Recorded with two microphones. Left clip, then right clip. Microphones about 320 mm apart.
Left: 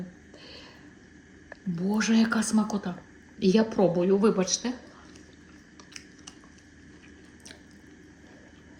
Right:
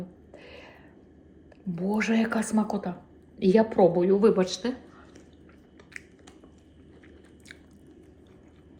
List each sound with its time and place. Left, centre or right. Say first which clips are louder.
1.7 s speech: even; centre
3.5 s a woman's voice: right 4 dB; right
4.2 s speech: right 2 dB; centre